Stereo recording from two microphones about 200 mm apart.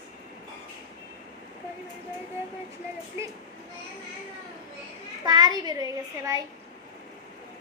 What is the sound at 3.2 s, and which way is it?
Speech, 15° right (ahead or behind).